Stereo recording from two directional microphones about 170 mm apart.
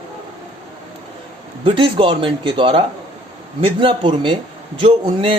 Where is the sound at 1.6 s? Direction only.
30° right (ahead or behind).